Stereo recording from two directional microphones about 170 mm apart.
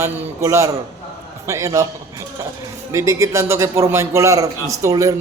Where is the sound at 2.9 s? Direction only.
15° right (ahead or behind).